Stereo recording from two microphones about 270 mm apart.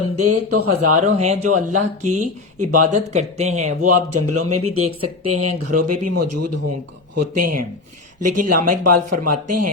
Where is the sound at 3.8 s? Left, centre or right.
Right.